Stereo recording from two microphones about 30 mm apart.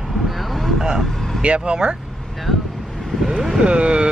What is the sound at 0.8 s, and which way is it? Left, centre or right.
Speech, centre.